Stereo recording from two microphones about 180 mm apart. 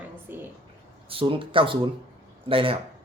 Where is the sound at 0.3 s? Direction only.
10° right (ahead or behind).